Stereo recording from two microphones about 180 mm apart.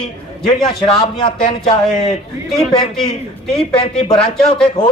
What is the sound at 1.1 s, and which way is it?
Speech, 25° left (ahead or behind).